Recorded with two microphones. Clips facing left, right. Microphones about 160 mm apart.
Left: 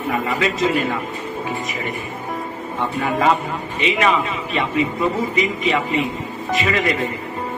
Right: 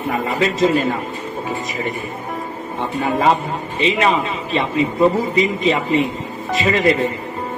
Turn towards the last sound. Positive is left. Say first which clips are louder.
# right 4 dB
turn(degrees=-30)  # may be behind; listen again after turning